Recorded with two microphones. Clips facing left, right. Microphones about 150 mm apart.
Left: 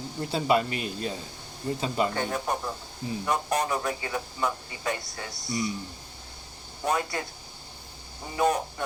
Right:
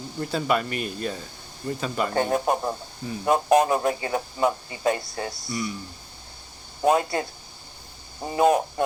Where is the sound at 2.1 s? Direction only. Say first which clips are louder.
Right 6 dB; 35° right (ahead or behind).